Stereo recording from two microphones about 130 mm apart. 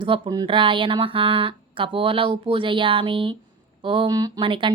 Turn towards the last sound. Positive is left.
turn(degrees=-40)  # may be behind; listen again after turning